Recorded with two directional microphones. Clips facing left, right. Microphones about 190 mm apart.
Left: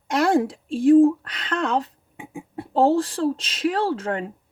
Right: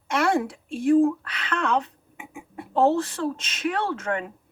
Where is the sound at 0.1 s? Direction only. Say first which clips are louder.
Left 3 dB; 35° left (ahead or behind).